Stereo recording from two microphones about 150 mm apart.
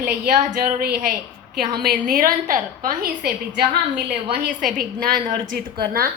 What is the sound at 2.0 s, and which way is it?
A woman's voice, 65° right (ahead or behind).